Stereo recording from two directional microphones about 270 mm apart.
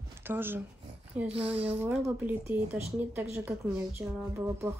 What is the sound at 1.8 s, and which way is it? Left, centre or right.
A woman's voice, centre.